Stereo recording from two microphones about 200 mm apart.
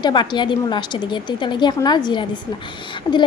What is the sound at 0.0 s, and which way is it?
A woman's voice, 20° left (ahead or behind).